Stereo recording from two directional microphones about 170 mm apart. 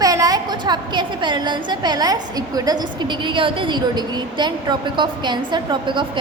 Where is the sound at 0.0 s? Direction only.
20° right (ahead or behind).